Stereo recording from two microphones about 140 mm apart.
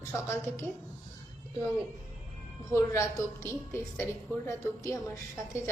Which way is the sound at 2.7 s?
20° left (ahead or behind).